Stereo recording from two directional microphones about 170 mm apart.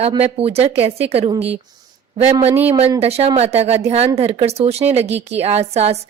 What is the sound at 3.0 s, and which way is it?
A woman's voice, 35° right (ahead or behind).